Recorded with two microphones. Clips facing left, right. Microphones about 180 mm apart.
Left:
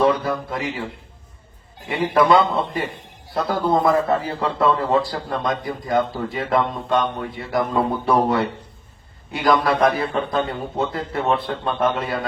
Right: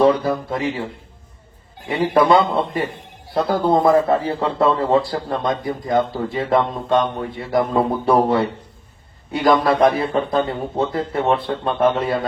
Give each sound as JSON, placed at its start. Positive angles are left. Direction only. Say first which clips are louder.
{"t": 0.0, "sound": "a man's voice", "louder": "right 3 dB", "side_deg": -25}
{"t": 1.9, "sound": "a man's voice", "louder": "right 2 dB", "side_deg": -25}